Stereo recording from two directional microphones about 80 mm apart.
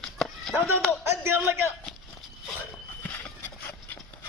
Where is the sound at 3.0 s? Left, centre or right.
Left.